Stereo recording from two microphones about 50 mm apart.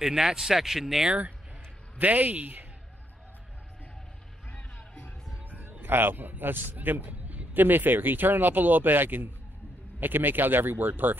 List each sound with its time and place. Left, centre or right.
0.0 s speech: centre
1.0 s speech: right
4.5 s music: left
5.4 s a man's voice: right